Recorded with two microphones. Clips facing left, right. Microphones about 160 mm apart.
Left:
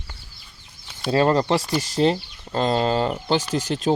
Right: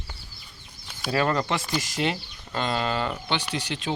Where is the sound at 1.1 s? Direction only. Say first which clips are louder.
Left 6 dB; 30° left (ahead or behind).